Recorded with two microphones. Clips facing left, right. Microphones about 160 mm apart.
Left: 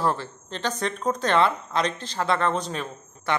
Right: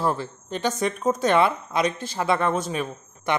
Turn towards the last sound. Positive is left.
turn(degrees=-10)  # may be behind; listen again after turning